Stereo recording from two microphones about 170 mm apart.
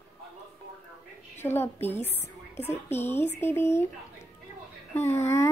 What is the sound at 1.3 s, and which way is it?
A woman's voice, 15° left (ahead or behind).